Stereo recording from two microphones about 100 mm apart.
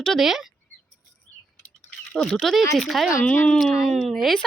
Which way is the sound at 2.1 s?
Centre (ahead or behind).